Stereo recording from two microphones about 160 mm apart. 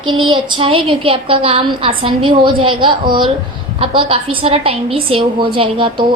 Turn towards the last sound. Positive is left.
turn(degrees=-35)  # may be behind; listen again after turning